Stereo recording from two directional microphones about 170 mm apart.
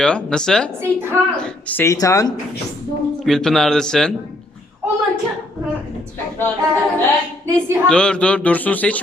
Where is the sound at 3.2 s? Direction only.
Centre (ahead or behind).